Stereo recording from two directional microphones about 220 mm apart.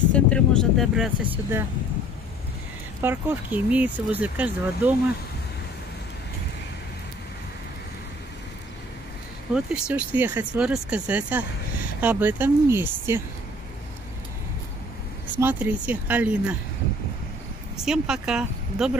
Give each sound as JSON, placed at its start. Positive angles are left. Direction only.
{"t": 0.1, "sound": "speech", "side_deg": 5}
{"t": 3.0, "sound": "a woman's voice", "side_deg": -10}
{"t": 9.5, "sound": "a woman's voice", "side_deg": -5}
{"t": 15.3, "sound": "a woman's voice", "side_deg": -10}
{"t": 17.7, "sound": "speech", "side_deg": -5}